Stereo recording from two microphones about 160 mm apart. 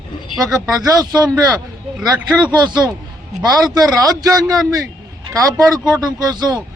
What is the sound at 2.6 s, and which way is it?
Speech, 25° right (ahead or behind).